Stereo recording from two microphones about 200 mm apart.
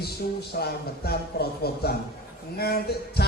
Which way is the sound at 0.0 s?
50° left (ahead or behind).